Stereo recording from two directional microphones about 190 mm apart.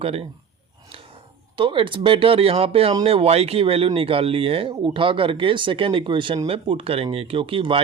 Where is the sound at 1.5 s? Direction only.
25° right (ahead or behind).